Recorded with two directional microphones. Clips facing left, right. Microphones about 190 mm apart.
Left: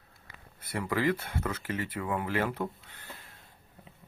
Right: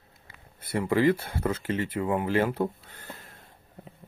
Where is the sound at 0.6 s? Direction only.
25° right (ahead or behind).